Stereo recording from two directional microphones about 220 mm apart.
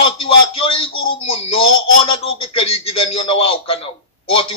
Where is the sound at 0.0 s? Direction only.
25° left (ahead or behind).